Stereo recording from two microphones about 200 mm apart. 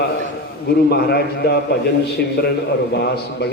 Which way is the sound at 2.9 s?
55° left (ahead or behind).